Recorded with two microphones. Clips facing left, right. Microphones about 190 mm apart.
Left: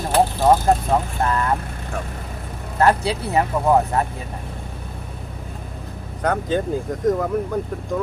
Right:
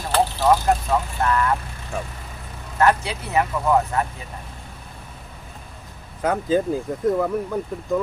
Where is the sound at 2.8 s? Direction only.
35° left (ahead or behind).